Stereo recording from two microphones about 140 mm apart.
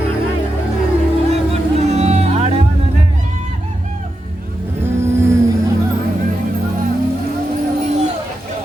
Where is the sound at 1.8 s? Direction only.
50° right (ahead or behind).